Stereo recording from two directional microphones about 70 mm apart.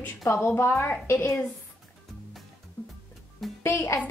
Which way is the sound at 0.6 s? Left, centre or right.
Left.